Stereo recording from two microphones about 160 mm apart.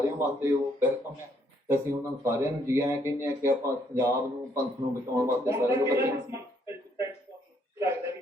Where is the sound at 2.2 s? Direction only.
15° right (ahead or behind).